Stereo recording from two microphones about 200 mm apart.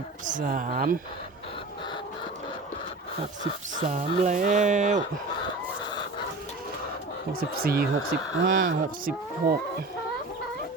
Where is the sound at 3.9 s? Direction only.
40° right (ahead or behind).